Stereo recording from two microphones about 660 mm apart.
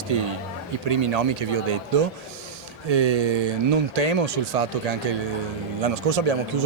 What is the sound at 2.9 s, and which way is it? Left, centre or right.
A man's voice, right.